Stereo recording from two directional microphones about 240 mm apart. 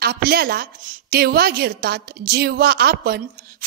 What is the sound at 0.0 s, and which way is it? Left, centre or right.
A woman's voice, right.